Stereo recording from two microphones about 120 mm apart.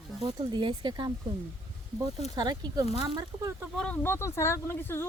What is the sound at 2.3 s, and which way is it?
Speech, 40° right (ahead or behind).